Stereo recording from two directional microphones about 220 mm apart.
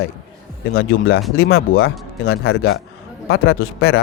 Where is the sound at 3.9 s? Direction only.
45° left (ahead or behind).